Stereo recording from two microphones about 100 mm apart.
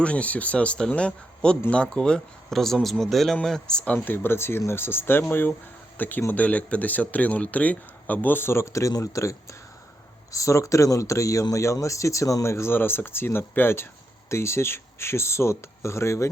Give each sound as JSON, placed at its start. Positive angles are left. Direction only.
{"t": 0.0, "sound": "speech", "side_deg": 15}